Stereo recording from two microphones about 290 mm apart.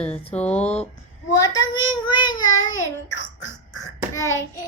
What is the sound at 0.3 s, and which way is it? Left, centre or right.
Speech, centre.